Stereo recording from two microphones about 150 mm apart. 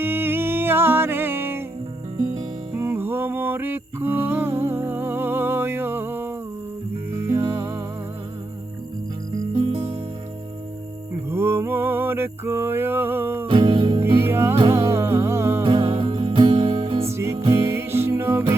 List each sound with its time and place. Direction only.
0.0 s music: 15° right (ahead or behind)
2.7 s a sound: 15° right (ahead or behind)
7.1 s music: 20° right (ahead or behind)
9.6 s music: 35° right (ahead or behind)
11.3 s a sound: 15° right (ahead or behind)
13.5 s music: 35° right (ahead or behind)
14.3 s music: 15° right (ahead or behind)
15.6 s music: 35° right (ahead or behind)
17.1 s music: 20° right (ahead or behind)